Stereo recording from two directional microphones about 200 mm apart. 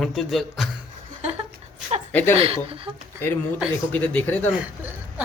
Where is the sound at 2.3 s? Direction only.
30° right (ahead or behind).